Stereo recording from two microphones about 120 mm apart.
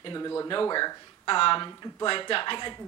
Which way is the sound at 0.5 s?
40° left (ahead or behind).